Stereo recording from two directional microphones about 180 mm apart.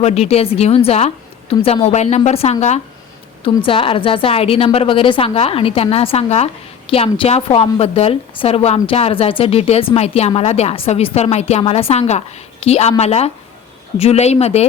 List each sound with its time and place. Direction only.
0.0 s a woman's voice: 35° left (ahead or behind)